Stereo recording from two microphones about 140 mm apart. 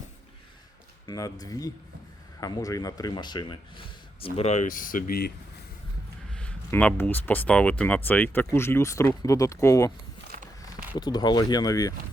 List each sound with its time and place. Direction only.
1.0 s speech: 25° left (ahead or behind); by 5.2 s 85° left
6.3 s speech: 10° left (ahead or behind)
10.9 s speech: 30° left (ahead or behind)